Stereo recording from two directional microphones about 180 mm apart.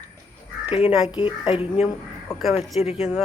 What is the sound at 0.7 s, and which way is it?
Speech, 30° left (ahead or behind).